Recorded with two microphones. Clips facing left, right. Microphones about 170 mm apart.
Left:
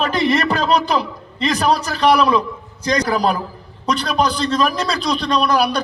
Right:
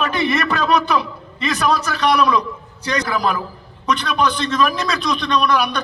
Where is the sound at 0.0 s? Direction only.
35° left (ahead or behind).